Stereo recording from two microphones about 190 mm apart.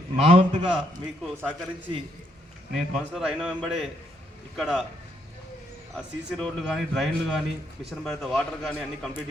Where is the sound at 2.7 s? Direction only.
Centre (ahead or behind).